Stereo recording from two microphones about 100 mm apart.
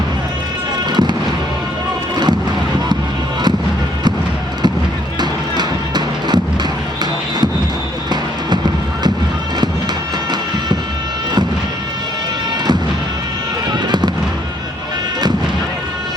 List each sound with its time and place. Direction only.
0.9 s fireworks: 45° right (ahead or behind)
5.2 s music: 45° right (ahead or behind)
13.7 s music: 45° right (ahead or behind)